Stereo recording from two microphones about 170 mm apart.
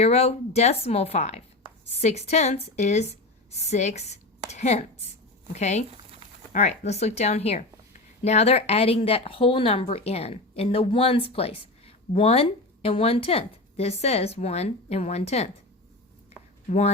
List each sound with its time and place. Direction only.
0.0 s a woman's voice: 40° left (ahead or behind)
16.6 s speech: 40° left (ahead or behind)